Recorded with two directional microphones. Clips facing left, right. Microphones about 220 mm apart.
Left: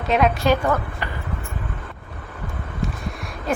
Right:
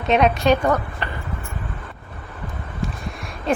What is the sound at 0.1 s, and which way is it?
Speech, 20° right (ahead or behind).